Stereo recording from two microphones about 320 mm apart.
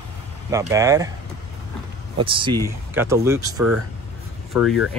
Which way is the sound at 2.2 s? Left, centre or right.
Centre.